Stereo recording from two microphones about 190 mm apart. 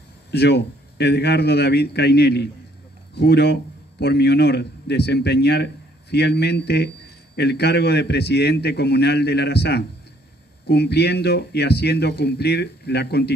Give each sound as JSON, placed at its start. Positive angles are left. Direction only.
{"t": 0.3, "sound": "a man's voice", "side_deg": 60}